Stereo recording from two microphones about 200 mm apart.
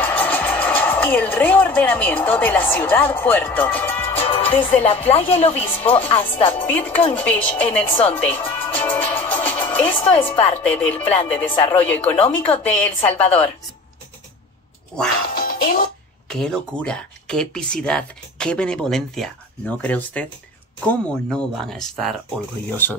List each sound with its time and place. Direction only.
0.0 s speech: 10° left (ahead or behind)
4.2 s music: 30° left (ahead or behind)
4.7 s a woman's voice: 10° left (ahead or behind)
5.1 s speech: 30° left (ahead or behind)
5.8 s a woman's voice: 10° left (ahead or behind)
15.3 s music: 45° left (ahead or behind)
16.3 s a woman's voice: 5° left (ahead or behind)